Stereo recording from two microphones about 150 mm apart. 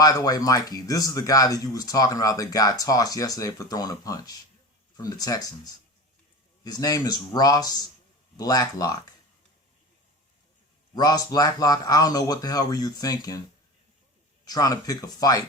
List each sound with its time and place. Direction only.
0.0 s speech: 25° left (ahead or behind)
10.9 s speech: 25° left (ahead or behind)
14.4 s speech: 25° left (ahead or behind)